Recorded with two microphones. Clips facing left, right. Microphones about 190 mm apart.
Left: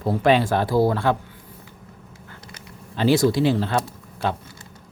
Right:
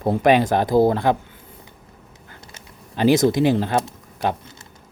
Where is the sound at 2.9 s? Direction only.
15° right (ahead or behind).